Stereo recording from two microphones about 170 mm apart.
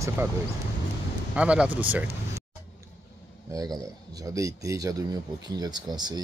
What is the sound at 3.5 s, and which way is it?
Speech, 20° right (ahead or behind).